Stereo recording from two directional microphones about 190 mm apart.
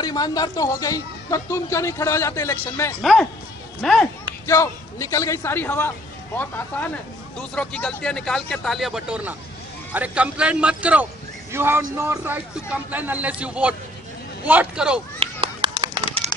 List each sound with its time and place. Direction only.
0.0 s a man's voice: 20° left (ahead or behind); by 4.1 s centre (ahead or behind)
4.5 s a man's voice: 15° left (ahead or behind); by 15.0 s 5° right (ahead or behind)
15.1 s a sound: 30° right (ahead or behind)